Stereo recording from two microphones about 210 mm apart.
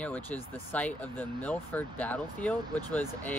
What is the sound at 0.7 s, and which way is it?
Speech, 5° left (ahead or behind).